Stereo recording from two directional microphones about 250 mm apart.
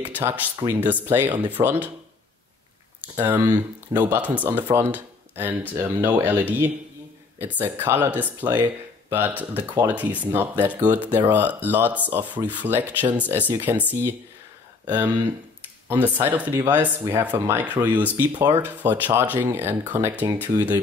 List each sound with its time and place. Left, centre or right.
0.0 s speech: centre
3.2 s speech: centre
15.9 s speech: centre